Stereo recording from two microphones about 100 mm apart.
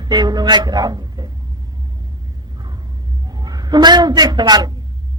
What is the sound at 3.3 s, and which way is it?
A man's voice, 40° right (ahead or behind).